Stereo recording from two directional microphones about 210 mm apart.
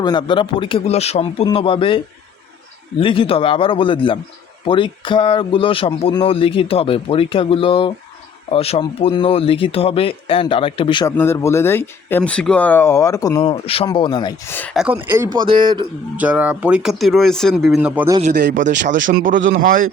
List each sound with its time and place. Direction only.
0.0 s speech: 20° left (ahead or behind)
3.0 s speech: 25° left (ahead or behind)
11.2 s speech: 10° left (ahead or behind)
13.4 s speech: 25° left (ahead or behind)
14.5 s speech: 5° left (ahead or behind); by 15.9 s 20° right (ahead or behind)
16.1 s speech: 5° right (ahead or behind)
18.5 s speech: 40° right (ahead or behind)
19.3 s speech: 65° right (ahead or behind)